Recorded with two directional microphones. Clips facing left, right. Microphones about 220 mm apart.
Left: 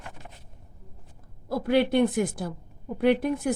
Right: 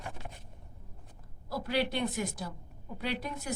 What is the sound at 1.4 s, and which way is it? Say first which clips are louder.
A woman's voice: left 9 dB; 55° left (ahead or behind).